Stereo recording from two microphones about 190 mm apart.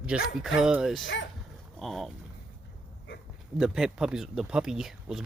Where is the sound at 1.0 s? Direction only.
70° left (ahead or behind).